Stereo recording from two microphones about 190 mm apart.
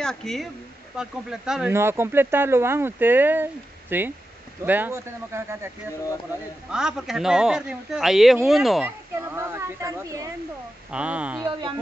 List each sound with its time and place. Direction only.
0.0 s speech: 5° left (ahead or behind); by 5.7 s 15° right (ahead or behind)
6.7 s speech: 5° right (ahead or behind)
9.1 s speech: 15° right (ahead or behind)
11.4 s speech: 25° right (ahead or behind)